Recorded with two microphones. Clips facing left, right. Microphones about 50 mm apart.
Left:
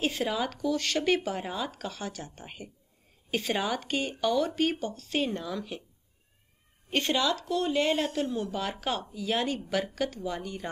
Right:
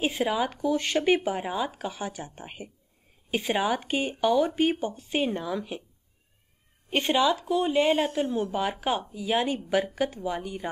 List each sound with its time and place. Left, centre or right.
0.0 s speech: centre
6.9 s speech: centre